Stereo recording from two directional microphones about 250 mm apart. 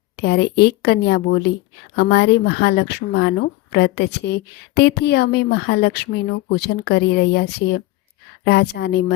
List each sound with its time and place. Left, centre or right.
0.2 s a woman's voice: left